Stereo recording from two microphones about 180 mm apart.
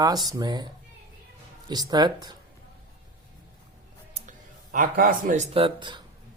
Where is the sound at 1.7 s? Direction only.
25° right (ahead or behind).